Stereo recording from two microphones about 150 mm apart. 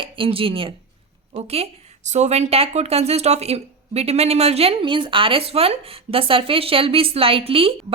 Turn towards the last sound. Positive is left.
turn(degrees=-40)  # may be behind; listen again after turning